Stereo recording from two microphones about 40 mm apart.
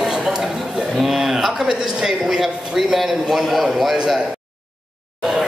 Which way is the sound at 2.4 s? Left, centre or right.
Centre.